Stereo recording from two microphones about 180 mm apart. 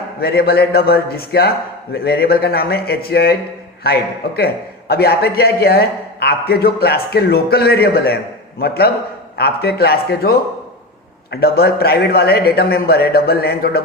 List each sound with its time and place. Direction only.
0.2 s a man's voice: 60° left (ahead or behind)